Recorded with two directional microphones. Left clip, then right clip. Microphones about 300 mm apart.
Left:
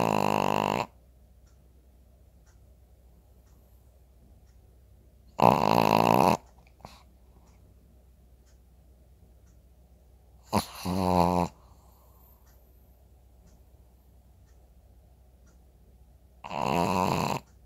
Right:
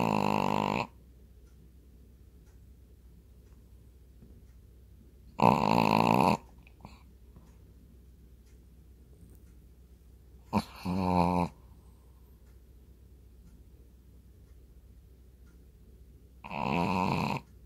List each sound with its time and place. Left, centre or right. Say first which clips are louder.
0.0 s a sound: left 3 dB; centre
5.3 s snoring: left 3 dB; centre
10.5 s dog: left 4 dB; centre
16.3 s snoring: left 4 dB; centre